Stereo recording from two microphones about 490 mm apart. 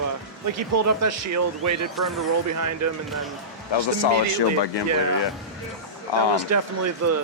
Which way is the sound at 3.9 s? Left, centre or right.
Left.